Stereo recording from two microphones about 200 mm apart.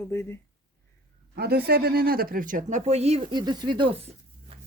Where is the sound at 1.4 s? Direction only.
50° right (ahead or behind); by 4.5 s 25° right (ahead or behind).